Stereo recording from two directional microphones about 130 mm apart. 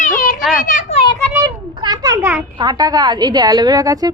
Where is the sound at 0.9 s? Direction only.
50° left (ahead or behind).